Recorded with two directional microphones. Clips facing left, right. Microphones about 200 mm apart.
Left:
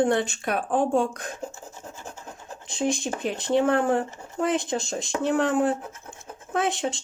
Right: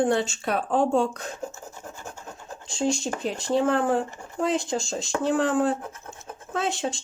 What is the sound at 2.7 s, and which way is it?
Speech, 20° left (ahead or behind).